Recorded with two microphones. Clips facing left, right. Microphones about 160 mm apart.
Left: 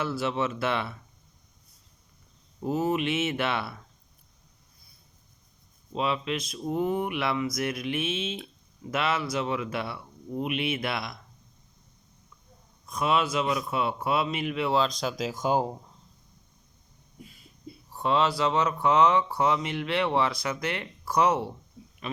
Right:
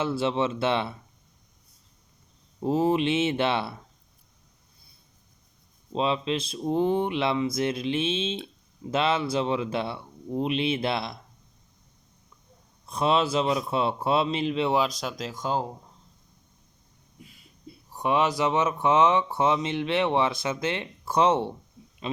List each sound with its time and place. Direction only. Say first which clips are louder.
0.0 s speech: right 3 dB; 25° right (ahead or behind)
2.6 s speech: right 4 dB; 30° right (ahead or behind)
5.9 s speech: right 3 dB; 25° right (ahead or behind)
12.8 s speech: right 2 dB; 30° right (ahead or behind)
14.8 s speech: even; 5° right (ahead or behind)
17.9 s speech: right 1 dB; 15° right (ahead or behind)